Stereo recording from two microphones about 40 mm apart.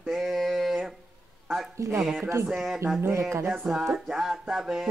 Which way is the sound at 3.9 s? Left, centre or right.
Centre.